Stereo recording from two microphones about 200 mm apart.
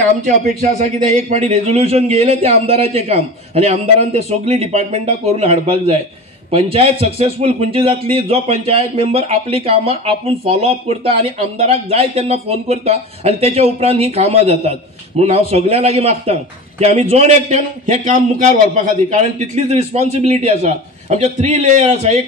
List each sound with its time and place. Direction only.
0.2 s a man's voice: 35° right (ahead or behind)